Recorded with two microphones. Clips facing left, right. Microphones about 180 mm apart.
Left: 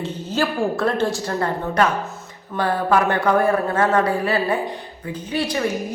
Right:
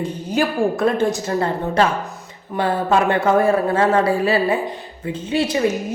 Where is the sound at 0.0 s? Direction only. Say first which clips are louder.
Right 2 dB; 15° right (ahead or behind).